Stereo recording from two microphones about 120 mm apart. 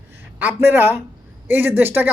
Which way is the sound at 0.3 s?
15° right (ahead or behind).